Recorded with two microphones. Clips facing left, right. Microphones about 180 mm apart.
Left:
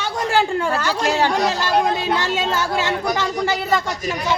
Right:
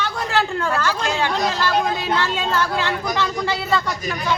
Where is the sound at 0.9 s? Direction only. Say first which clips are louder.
Left 4 dB; 40° left (ahead or behind).